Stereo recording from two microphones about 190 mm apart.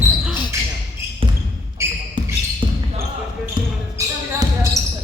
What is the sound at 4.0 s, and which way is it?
Basketball bounce, 20° right (ahead or behind).